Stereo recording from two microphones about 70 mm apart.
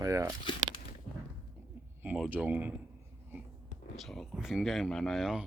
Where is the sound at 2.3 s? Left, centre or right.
Right.